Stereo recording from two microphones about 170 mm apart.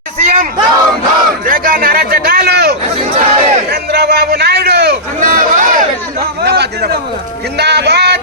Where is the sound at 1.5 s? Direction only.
55° right (ahead or behind).